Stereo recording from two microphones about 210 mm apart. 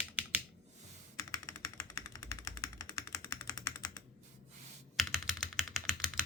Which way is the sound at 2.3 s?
15° left (ahead or behind).